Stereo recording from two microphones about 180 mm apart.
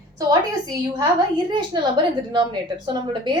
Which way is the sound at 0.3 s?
20° right (ahead or behind).